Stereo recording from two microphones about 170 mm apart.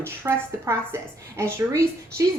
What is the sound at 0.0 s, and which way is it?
A woman's voice, 15° right (ahead or behind).